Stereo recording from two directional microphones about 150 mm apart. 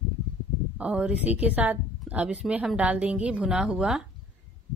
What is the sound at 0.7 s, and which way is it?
A woman's voice, 5° right (ahead or behind).